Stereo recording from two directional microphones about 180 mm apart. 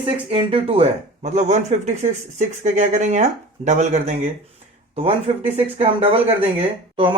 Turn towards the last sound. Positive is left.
turn(degrees=-30)  # may be behind; listen again after turning